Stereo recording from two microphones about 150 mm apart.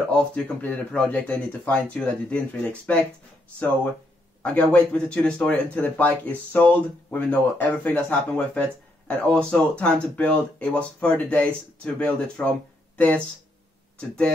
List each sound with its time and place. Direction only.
0.1 s speech: 5° left (ahead or behind)
4.4 s speech: 10° left (ahead or behind)